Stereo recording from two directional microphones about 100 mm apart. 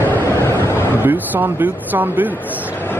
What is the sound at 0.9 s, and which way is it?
Speech, 20° right (ahead or behind).